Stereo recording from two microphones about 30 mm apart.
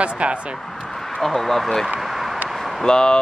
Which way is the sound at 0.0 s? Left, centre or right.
Right.